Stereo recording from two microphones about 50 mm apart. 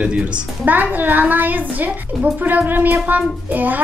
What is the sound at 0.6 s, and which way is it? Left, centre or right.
A woman's voice, right.